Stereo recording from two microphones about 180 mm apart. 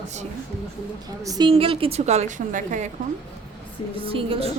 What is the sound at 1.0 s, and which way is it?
Speech, 20° right (ahead or behind).